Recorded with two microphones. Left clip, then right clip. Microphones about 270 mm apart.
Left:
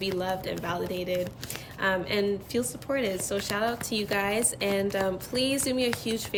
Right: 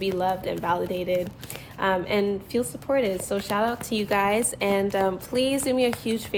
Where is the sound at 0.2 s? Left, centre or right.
Centre.